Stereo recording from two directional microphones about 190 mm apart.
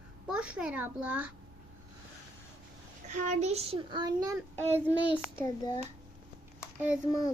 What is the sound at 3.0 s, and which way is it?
A child's voice, 40° right (ahead or behind).